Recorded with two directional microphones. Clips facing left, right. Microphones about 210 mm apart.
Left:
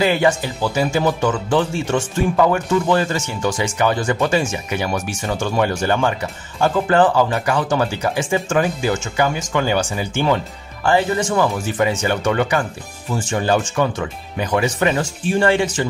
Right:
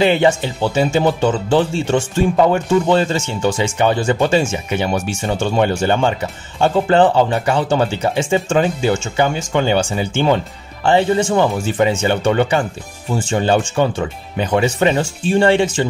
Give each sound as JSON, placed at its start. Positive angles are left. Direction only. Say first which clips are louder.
{"t": 0.0, "sound": "speech", "louder": "right 3 dB", "side_deg": -25}